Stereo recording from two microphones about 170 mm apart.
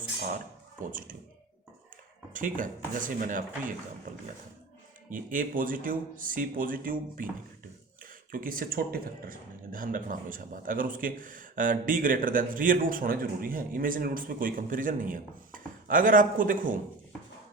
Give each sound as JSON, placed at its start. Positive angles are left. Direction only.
{"t": 0.2, "sound": "speech", "side_deg": -50}
{"t": 2.3, "sound": "speech", "side_deg": -50}
{"t": 8.3, "sound": "speech", "side_deg": -55}